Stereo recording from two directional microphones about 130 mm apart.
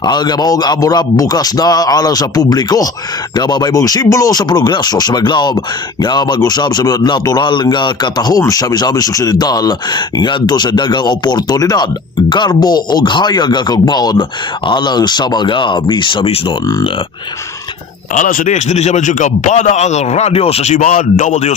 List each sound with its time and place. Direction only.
0.0 s a man's voice: 35° left (ahead or behind)
18.1 s a man's voice: 80° left; by 20.7 s 50° left (ahead or behind)
20.7 s a man's voice: 85° left; by 21.5 s 65° left (ahead or behind)